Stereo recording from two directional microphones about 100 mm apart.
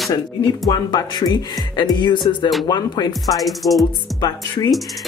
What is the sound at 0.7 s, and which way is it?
Speech, 45° left (ahead or behind).